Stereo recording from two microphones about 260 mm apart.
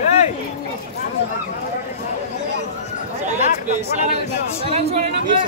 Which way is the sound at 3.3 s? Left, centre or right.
Right.